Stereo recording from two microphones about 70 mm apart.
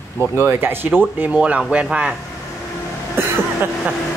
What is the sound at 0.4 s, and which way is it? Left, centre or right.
Speech, right.